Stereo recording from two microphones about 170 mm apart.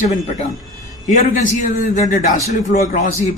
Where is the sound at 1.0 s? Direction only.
50° left (ahead or behind).